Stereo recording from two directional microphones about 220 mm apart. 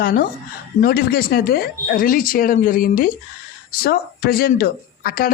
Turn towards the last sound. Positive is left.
turn(degrees=40)  # may be behind; listen again after turning